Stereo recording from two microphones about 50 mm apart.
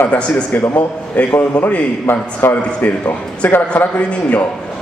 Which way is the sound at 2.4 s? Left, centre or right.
Left.